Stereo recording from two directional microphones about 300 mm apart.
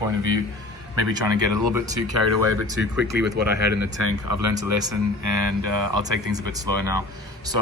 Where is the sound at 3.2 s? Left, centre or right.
Right.